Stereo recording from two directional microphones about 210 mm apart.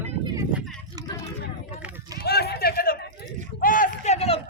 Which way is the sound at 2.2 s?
50° left (ahead or behind).